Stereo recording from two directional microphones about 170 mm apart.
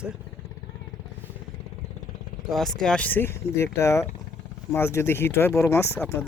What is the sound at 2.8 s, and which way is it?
Speech, 5° left (ahead or behind).